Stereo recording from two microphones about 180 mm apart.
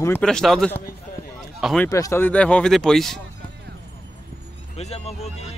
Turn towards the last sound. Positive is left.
turn(degrees=35)  # may be behind; listen again after turning